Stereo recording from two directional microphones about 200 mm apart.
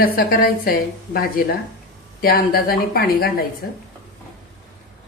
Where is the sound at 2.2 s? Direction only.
50° left (ahead or behind).